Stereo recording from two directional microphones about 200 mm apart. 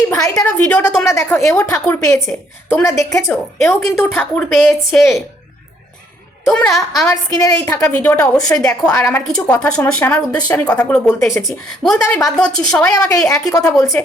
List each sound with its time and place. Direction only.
0.1 s a woman's voice: 15° left (ahead or behind)
6.4 s a woman's voice: 5° left (ahead or behind)
7.1 s speech: 15° left (ahead or behind)
11.4 s a woman's voice: centre (ahead or behind)
13.1 s speech: 15° left (ahead or behind)
13.7 s a woman's voice: centre (ahead or behind)